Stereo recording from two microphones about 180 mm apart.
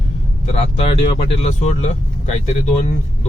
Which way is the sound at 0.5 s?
35° left (ahead or behind).